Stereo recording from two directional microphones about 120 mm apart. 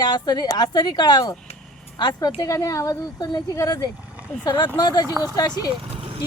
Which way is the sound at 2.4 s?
25° left (ahead or behind).